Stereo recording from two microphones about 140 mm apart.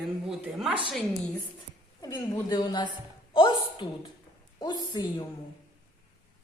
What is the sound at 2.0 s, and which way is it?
A man's voice, 30° left (ahead or behind).